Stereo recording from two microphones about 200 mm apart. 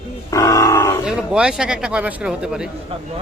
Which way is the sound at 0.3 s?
15° left (ahead or behind).